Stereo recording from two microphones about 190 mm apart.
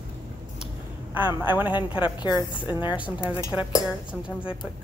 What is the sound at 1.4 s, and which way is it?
Speech, 10° right (ahead or behind).